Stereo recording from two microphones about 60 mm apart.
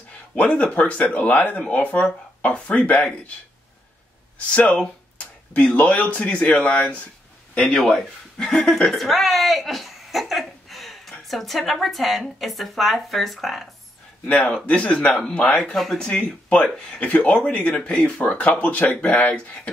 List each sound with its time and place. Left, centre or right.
0.3 s speech: left
4.6 s a sound: left
5.8 s speech: left
7.6 s speech: centre
14.2 s speech: centre
15.7 s speech: centre; by 19.5 s left